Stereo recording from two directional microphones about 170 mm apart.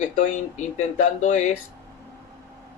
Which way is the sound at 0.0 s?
45° left (ahead or behind).